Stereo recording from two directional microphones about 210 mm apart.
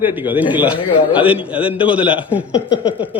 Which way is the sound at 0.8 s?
25° left (ahead or behind).